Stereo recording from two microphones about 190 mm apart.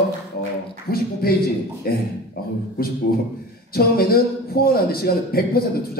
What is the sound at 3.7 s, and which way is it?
A man's voice, 55° left (ahead or behind).